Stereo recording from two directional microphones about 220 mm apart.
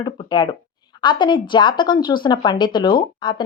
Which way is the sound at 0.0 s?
20° left (ahead or behind).